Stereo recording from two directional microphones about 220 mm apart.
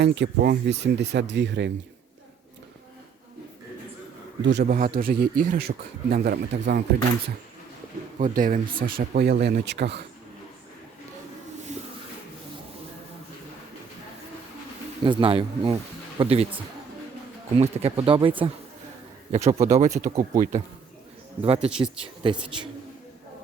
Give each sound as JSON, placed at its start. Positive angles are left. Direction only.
{"t": 0.0, "sound": "speech", "side_deg": -50}
{"t": 4.4, "sound": "speech", "side_deg": -55}
{"t": 4.9, "sound": "speech", "side_deg": -40}
{"t": 8.2, "sound": "speech", "side_deg": -35}
{"t": 15.0, "sound": "speech", "side_deg": -25}
{"t": 17.6, "sound": "speech", "side_deg": -30}